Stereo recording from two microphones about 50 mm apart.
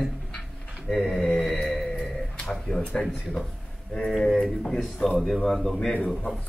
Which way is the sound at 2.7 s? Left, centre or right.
Left.